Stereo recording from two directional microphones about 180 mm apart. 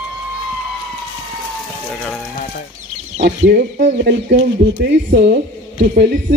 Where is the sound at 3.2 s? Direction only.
65° right (ahead or behind).